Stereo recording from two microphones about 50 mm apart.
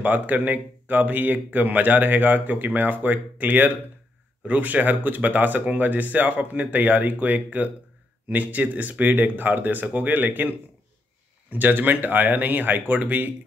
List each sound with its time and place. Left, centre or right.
0.0 s speech: right
11.5 s speech: right